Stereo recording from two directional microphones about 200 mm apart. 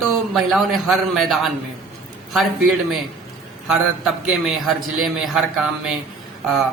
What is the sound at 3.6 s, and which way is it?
A man's voice, centre (ahead or behind).